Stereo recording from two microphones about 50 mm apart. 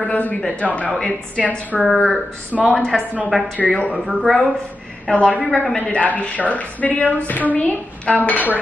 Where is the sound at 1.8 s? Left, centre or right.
Centre.